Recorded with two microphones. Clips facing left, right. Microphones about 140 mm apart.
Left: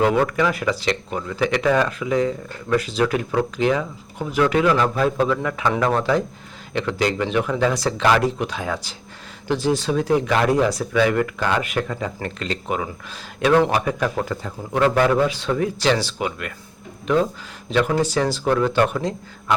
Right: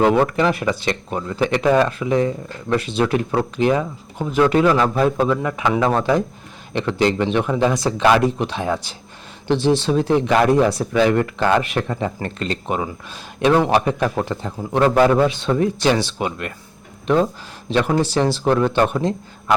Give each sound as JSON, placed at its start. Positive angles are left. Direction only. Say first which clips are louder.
{"t": 0.0, "sound": "speech", "louder": "right 3 dB", "side_deg": -25}
{"t": 5.0, "sound": "speech", "louder": "right 2 dB", "side_deg": -20}
{"t": 14.8, "sound": "speech", "louder": "right 3 dB", "side_deg": -40}
{"t": 15.3, "sound": "speech", "louder": "right 3 dB", "side_deg": -25}
{"t": 18.0, "sound": "speech", "louder": "right 2 dB", "side_deg": -25}